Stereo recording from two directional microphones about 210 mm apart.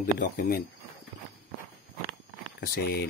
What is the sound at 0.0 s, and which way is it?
Speech, 40° left (ahead or behind).